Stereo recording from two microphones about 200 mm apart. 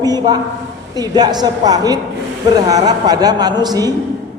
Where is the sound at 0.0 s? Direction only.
20° right (ahead or behind).